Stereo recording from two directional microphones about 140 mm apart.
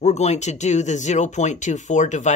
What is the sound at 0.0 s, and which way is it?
Speech, 55° left (ahead or behind).